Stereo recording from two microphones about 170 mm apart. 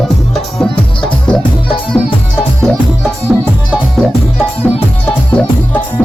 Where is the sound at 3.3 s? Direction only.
5° right (ahead or behind).